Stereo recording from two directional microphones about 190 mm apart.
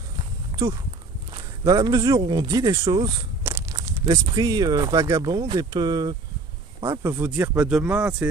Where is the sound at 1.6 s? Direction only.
20° right (ahead or behind).